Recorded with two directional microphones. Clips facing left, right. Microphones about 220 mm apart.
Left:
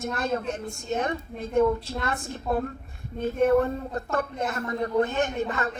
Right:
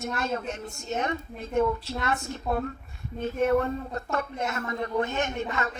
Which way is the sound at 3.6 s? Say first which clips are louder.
Left 1 dB; 35° left (ahead or behind).